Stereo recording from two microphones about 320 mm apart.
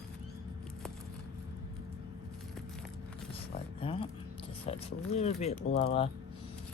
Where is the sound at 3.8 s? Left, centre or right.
Centre.